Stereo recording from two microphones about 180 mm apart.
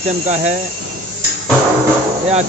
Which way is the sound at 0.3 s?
40° right (ahead or behind).